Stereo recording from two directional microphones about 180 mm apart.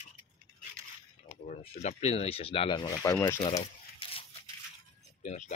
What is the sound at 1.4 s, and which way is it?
Speech, 35° left (ahead or behind).